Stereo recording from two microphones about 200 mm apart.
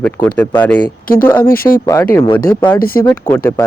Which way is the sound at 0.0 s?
5° left (ahead or behind).